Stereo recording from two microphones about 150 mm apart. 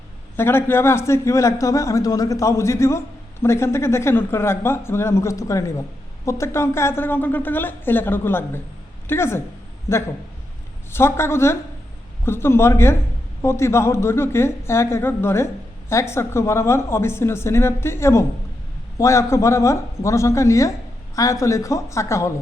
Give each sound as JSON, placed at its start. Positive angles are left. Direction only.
{"t": 0.3, "sound": "a man's voice", "side_deg": 15}